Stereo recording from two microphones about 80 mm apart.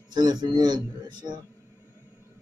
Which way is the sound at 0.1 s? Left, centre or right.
Right.